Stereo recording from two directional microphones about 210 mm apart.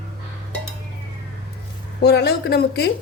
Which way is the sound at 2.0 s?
50° left (ahead or behind).